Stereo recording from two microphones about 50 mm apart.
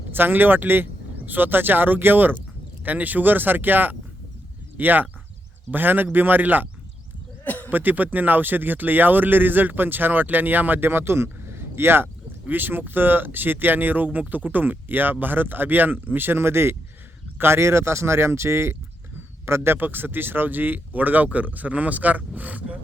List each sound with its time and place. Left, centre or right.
0.1 s speech: right
7.4 s sheep: left
7.7 s speech: right
12.5 s speech: right